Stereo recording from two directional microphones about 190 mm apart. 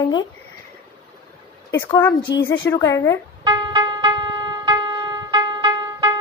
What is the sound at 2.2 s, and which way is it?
Speech, 60° left (ahead or behind).